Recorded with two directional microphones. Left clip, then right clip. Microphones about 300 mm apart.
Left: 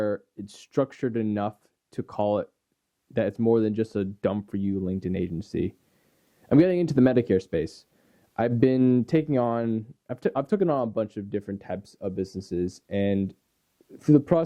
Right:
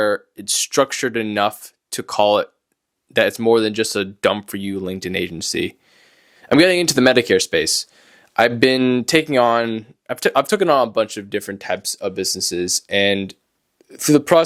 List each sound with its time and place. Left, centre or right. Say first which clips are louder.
0.0 s speech: right 9 dB; centre